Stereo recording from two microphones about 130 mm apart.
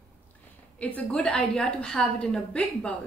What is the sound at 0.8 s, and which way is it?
A woman's voice, 10° left (ahead or behind).